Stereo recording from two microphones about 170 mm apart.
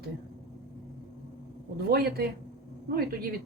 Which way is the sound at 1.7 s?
65° right (ahead or behind).